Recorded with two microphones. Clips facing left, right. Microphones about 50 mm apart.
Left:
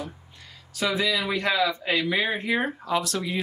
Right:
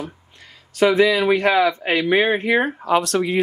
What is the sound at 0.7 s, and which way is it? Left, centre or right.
Speech, right.